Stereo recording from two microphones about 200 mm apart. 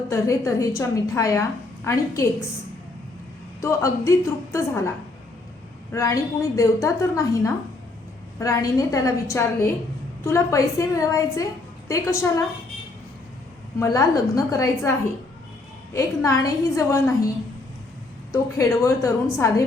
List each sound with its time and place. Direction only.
0.1 s a woman's voice: 15° left (ahead or behind)
3.6 s a woman's voice: 15° left (ahead or behind)
5.9 s a woman's voice: 15° left (ahead or behind)
13.7 s a woman's voice: 15° left (ahead or behind)
18.3 s a woman's voice: 15° left (ahead or behind)